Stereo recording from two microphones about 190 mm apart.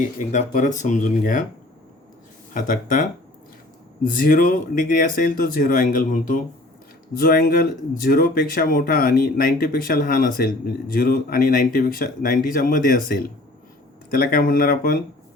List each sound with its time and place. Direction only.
0.0 s speech: 40° left (ahead or behind)
2.5 s speech: 45° left (ahead or behind)
4.2 s speech: 45° left (ahead or behind)